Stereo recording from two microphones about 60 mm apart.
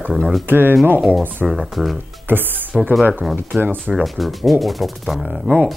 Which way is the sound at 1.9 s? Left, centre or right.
Right.